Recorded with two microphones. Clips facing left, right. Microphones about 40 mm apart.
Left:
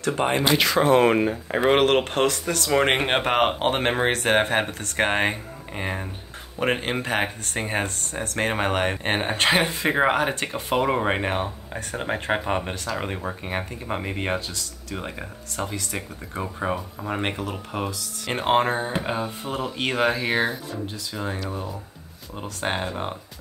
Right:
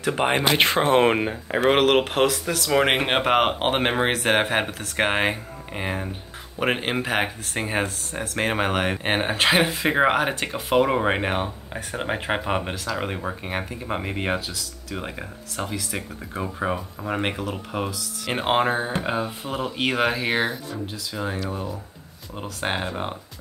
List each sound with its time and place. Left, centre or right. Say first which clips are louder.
0.1 s speech: even; right
1.1 s speech: left 2 dB; centre
1.7 s speech: right 1 dB; centre